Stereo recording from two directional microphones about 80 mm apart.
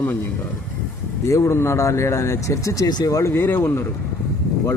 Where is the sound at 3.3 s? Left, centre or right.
Left.